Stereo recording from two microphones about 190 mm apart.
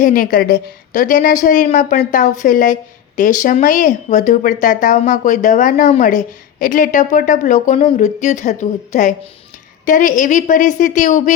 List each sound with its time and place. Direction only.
0.0 s a woman's voice: 45° left (ahead or behind)